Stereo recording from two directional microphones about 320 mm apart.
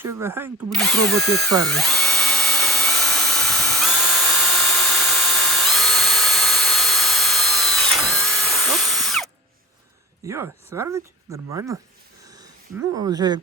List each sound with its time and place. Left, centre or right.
0.0 s speech: centre
1.6 s drill: centre
10.2 s speech: centre
12.9 s speech: centre